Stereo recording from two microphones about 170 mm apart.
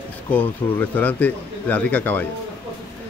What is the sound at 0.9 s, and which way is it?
Speech, 10° left (ahead or behind).